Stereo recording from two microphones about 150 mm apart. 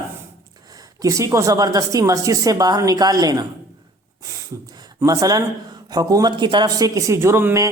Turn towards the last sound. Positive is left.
turn(degrees=-15)  # may be behind; listen again after turning